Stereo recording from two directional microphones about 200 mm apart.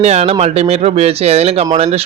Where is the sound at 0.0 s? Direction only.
35° right (ahead or behind).